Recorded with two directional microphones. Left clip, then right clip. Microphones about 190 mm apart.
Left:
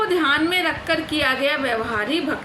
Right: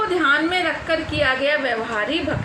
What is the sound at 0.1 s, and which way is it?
A woman's voice, 65° left (ahead or behind).